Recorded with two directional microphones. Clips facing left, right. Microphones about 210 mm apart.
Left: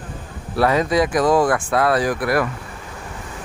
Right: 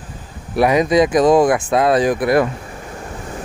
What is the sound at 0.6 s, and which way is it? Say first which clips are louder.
Speech: right 4 dB; 15° right (ahead or behind).